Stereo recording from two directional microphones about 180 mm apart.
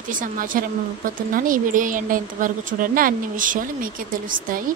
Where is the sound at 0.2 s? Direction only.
50° right (ahead or behind).